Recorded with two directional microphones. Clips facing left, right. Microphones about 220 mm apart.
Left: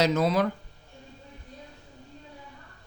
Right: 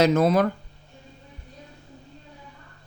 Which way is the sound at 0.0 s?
50° right (ahead or behind).